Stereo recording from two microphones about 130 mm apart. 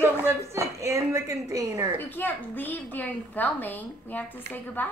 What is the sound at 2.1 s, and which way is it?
A woman's voice, 15° left (ahead or behind).